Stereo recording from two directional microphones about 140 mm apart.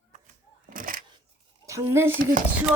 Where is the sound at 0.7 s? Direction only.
75° right (ahead or behind).